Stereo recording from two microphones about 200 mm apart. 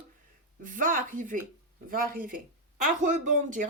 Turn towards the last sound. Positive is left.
turn(degrees=-40)  # may be behind; listen again after turning